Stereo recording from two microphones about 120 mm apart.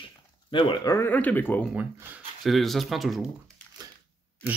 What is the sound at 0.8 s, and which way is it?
Speech, 25° left (ahead or behind).